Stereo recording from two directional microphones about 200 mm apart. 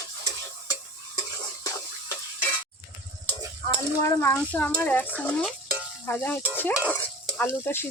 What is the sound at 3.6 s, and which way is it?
Speech, 15° left (ahead or behind).